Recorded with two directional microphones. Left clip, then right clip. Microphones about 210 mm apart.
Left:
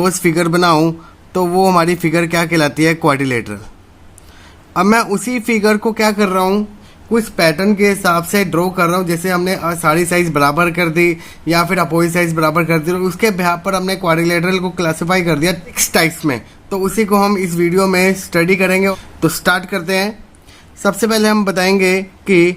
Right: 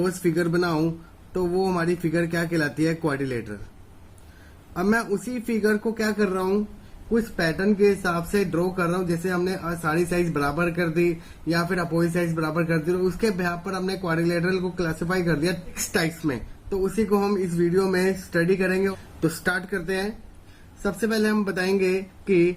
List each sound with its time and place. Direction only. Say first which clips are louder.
0.0 s speech: left 10 dB; 50° left (ahead or behind)
4.7 s speech: left 11 dB; 50° left (ahead or behind)